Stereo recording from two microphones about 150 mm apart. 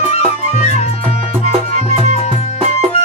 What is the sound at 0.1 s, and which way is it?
Music, 45° left (ahead or behind).